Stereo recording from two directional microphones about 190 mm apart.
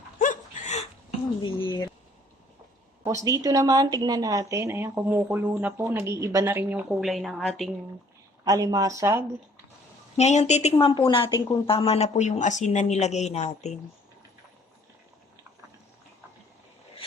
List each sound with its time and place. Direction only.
0.2 s dog: 40° left (ahead or behind)
1.6 s a sound: 20° left (ahead or behind)
3.2 s a woman's voice: 15° right (ahead or behind); by 7.7 s centre (ahead or behind)
8.4 s speech: 20° right (ahead or behind)
10.2 s speech: 35° left (ahead or behind)